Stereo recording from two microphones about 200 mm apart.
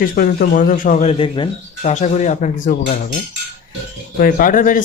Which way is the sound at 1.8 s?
35° left (ahead or behind).